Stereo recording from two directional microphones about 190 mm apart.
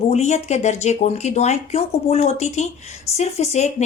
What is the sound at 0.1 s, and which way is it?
Speech, 35° left (ahead or behind).